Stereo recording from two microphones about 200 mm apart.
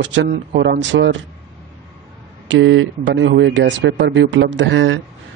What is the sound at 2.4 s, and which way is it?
Speech, 70° right (ahead or behind).